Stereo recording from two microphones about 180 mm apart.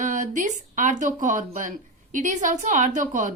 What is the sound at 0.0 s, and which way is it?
A woman's voice, 45° right (ahead or behind).